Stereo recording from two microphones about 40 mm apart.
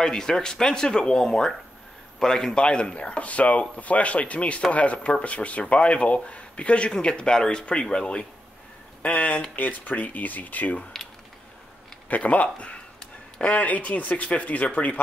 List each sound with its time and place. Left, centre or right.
0.0 s speech: centre
9.0 s speech: left
12.1 s speech: left